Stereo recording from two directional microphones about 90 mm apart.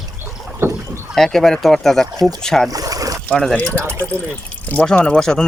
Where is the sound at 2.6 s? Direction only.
40° right (ahead or behind).